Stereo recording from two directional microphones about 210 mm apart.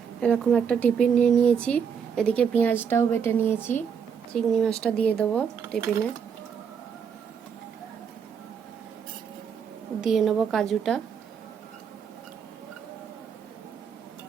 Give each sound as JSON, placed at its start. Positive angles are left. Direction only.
{"t": 0.2, "sound": "speech", "side_deg": 5}
{"t": 10.0, "sound": "speech", "side_deg": 0}